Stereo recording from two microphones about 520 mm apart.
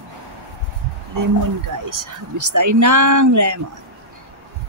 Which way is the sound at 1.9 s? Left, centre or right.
Right.